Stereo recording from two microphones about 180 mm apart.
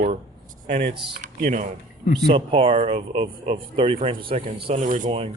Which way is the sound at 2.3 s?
30° right (ahead or behind).